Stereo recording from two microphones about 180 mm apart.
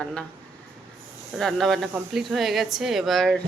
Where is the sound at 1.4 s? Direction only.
Centre (ahead or behind).